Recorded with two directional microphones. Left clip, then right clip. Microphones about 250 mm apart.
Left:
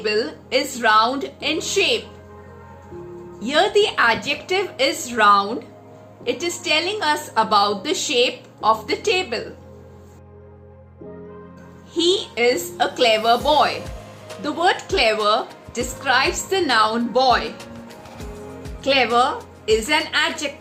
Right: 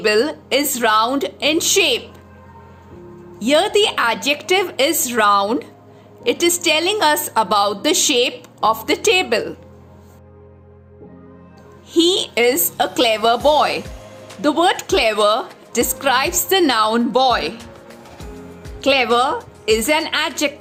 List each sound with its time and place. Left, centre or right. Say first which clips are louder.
0.0 s a woman's voice: right 6 dB; right
3.4 s a woman's voice: right 2 dB; right
11.9 s a woman's voice: right 4 dB; right
18.8 s a woman's voice: right 2 dB; right